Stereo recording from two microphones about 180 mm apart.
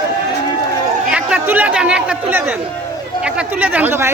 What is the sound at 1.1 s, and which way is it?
Speech, 10° right (ahead or behind).